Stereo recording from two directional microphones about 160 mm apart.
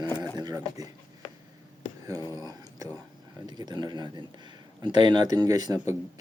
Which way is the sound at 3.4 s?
25° right (ahead or behind).